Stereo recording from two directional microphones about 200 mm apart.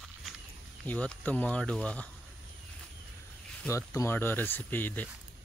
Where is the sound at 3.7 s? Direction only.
15° left (ahead or behind).